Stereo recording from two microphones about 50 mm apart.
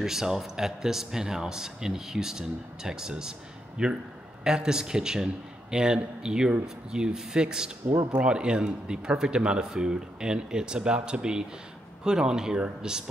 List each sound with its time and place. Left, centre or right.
0.0 s speech: centre